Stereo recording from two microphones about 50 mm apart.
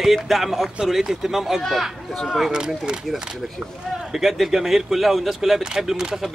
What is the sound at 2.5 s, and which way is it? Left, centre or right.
Speech, centre.